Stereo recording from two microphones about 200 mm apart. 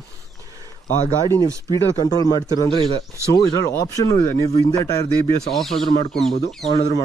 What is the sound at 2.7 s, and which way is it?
Speech, 25° right (ahead or behind).